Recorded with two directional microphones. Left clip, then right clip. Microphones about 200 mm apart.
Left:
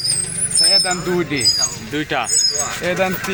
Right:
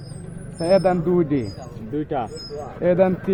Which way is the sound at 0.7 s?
45° right (ahead or behind).